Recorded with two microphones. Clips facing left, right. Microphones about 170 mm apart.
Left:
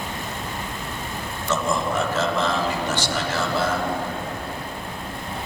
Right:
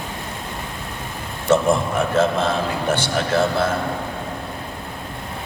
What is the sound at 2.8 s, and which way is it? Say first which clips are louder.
Speech: right 4 dB; 55° right (ahead or behind).